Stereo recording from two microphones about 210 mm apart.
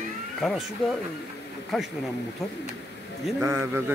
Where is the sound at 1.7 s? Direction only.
Centre (ahead or behind).